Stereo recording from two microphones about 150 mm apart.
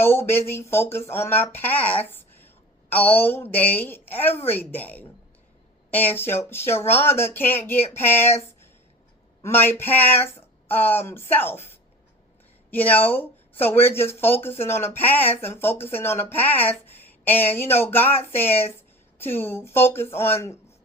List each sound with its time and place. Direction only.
0.0 s speech: 15° left (ahead or behind)
9.4 s speech: 15° left (ahead or behind)
12.7 s speech: 10° left (ahead or behind)